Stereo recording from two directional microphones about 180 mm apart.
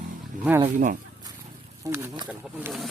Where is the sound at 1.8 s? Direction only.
15° right (ahead or behind).